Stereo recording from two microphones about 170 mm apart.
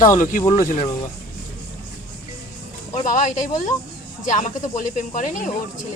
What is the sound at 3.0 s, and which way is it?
A woman's voice, 50° left (ahead or behind).